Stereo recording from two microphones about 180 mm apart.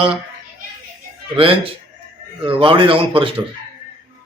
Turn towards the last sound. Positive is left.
turn(degrees=-30)  # may be behind; listen again after turning